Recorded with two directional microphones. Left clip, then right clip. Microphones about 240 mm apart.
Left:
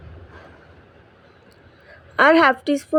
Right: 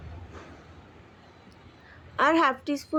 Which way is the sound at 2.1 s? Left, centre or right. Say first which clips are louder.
Left 8 dB; left.